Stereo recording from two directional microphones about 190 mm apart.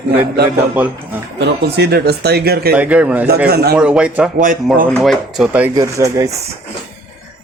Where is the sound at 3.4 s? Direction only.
55° right (ahead or behind).